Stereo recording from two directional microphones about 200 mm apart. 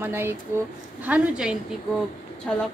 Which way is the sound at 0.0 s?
10° right (ahead or behind).